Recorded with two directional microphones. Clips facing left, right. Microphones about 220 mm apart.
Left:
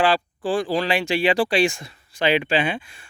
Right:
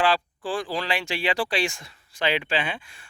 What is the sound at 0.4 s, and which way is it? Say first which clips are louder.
Speech: left 7 dB; 15° left (ahead or behind).